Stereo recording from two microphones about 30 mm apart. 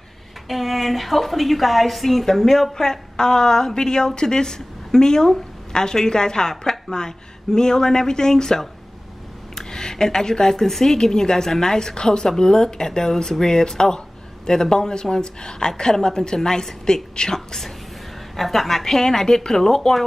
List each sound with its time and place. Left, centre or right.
0.5 s a woman's voice: centre; by 17.6 s left
18.3 s a woman's voice: centre
18.9 s a woman's voice: centre